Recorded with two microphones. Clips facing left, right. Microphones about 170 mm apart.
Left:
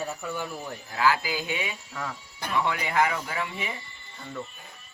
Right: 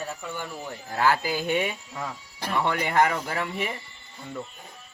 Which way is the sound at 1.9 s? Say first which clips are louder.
Right 1 dB; 15° right (ahead or behind).